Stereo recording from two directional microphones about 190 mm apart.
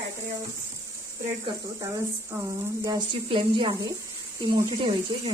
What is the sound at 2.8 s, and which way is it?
Speech, 25° right (ahead or behind).